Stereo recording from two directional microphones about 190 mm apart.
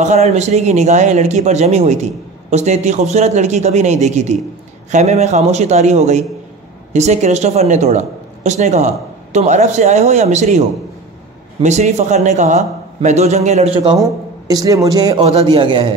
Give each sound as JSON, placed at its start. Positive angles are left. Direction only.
{"t": 0.0, "sound": "a woman's voice", "side_deg": -35}
{"t": 11.6, "sound": "a woman's voice", "side_deg": -40}